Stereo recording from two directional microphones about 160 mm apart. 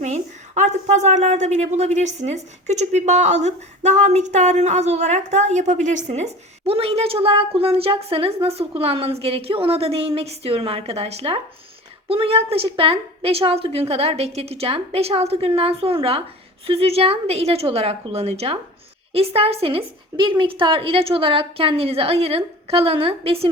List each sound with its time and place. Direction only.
0.0 s a woman's voice: 45° right (ahead or behind)
6.7 s a woman's voice: 35° right (ahead or behind)